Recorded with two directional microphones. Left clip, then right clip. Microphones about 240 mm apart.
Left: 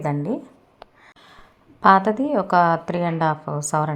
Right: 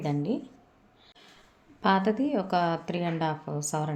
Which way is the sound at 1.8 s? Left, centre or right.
Centre.